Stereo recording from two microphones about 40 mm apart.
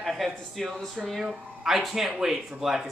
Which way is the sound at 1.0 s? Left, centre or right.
Centre.